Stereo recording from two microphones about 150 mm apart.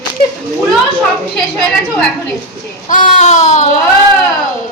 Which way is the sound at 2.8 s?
60° left (ahead or behind).